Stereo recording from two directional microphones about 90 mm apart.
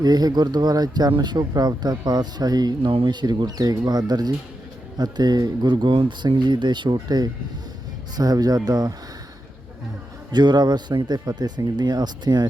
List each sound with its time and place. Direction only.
0.0 s speech: 50° right (ahead or behind)
10.3 s speech: 55° right (ahead or behind)